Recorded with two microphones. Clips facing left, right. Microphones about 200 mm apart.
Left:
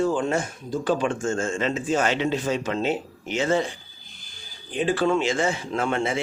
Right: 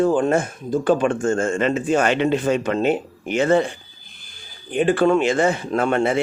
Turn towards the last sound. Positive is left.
turn(degrees=-60)  # may be behind; listen again after turning